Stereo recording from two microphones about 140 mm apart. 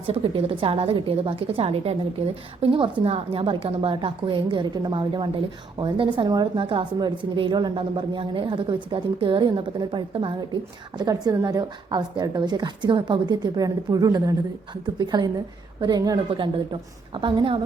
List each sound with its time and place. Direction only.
0.1 s a woman's voice: 40° right (ahead or behind)
17.2 s a woman's voice: 35° right (ahead or behind)